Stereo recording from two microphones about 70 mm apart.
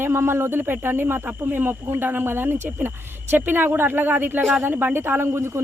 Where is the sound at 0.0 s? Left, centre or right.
Right.